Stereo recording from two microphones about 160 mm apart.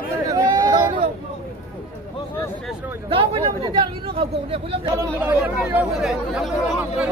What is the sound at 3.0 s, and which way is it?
Speech, 35° right (ahead or behind).